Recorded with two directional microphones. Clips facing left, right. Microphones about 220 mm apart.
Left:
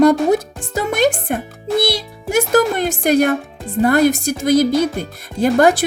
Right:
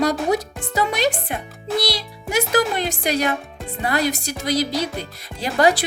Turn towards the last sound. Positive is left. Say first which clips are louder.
# left 5 dB
turn(degrees=50)  # may be behind; listen again after turning